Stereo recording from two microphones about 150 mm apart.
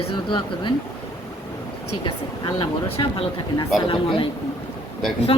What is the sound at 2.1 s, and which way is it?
Speech, 30° left (ahead or behind).